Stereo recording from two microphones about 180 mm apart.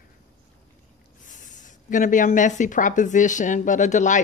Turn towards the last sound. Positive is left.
turn(degrees=45)  # may be behind; listen again after turning